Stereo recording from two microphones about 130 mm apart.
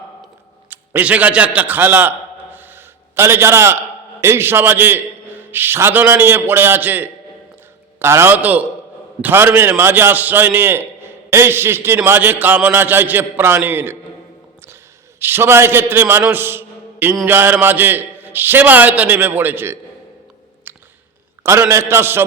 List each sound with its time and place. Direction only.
0.7 s a man's voice: 10° right (ahead or behind)
15.2 s a man's voice: 15° right (ahead or behind)
20.7 s a sound: 15° right (ahead or behind)
21.7 s a man's voice: 20° right (ahead or behind)